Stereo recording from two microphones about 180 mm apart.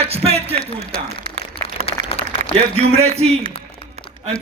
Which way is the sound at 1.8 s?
35° left (ahead or behind).